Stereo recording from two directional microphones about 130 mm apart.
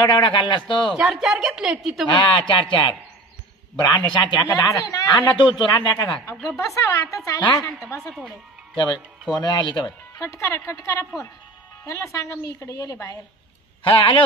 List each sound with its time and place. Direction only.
0.0 s a man's voice: 40° left (ahead or behind)
0.9 s a woman's voice: centre (ahead or behind)
2.0 s a man's voice: 35° left (ahead or behind)
6.3 s a woman's voice: centre (ahead or behind)
6.6 s a woman's voice: 25° left (ahead or behind)
8.7 s a man's voice: 35° left (ahead or behind)
10.1 s a woman's voice: 25° left (ahead or behind)
13.8 s a man's voice: 40° left (ahead or behind)